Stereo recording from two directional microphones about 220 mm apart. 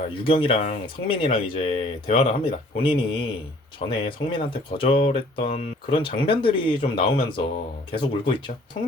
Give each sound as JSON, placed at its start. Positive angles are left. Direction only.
{"t": 0.1, "sound": "speech", "side_deg": 25}